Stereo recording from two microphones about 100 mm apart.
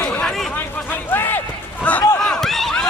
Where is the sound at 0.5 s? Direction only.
20° left (ahead or behind).